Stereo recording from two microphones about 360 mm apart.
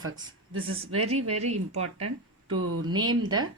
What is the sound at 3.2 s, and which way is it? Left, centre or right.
Speech, centre.